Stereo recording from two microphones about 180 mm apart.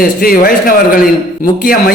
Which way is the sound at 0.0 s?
55° left (ahead or behind).